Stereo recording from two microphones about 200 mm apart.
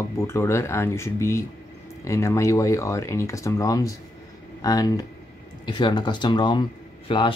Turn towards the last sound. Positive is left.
turn(degrees=25)  # may be behind; listen again after turning